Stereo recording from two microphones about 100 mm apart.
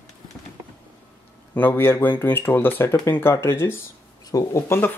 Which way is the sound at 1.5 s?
20° left (ahead or behind).